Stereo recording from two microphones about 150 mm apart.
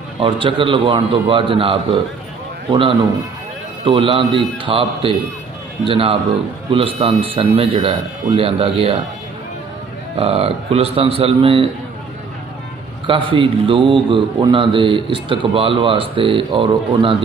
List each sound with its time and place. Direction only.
0.2 s speech: 35° right (ahead or behind)
3.8 s speech: 35° right (ahead or behind)
10.1 s speech: 40° right (ahead or behind)
13.0 s speech: 35° right (ahead or behind)